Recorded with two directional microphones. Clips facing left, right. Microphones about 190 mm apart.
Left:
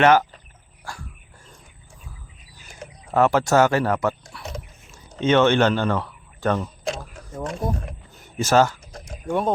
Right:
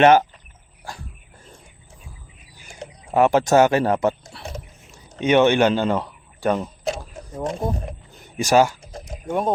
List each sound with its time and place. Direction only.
0.0 s speech: 20° right (ahead or behind)
3.1 s speech: 15° right (ahead or behind)
5.2 s speech: 15° right (ahead or behind)
7.0 s a sound: 30° right (ahead or behind)
8.4 s speech: 15° right (ahead or behind)
8.9 s a sound: 25° right (ahead or behind)